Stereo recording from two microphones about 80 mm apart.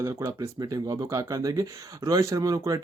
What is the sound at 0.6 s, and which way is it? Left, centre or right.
Speech, right.